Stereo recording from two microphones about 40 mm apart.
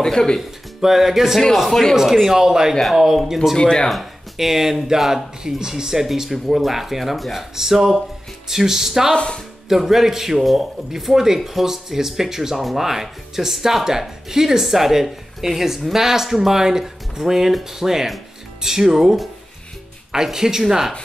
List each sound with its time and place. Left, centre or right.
0.0 s speech: centre
0.7 s speech: centre
1.7 s speech: centre
2.2 s speech: centre
2.7 s speech: centre
3.5 s speech: centre
3.9 s speech: centre
9.1 s speech: left
9.7 s speech: centre